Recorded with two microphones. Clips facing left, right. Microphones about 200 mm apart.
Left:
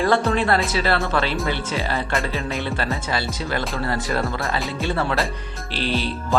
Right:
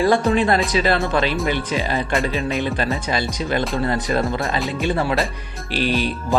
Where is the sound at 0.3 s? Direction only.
15° right (ahead or behind).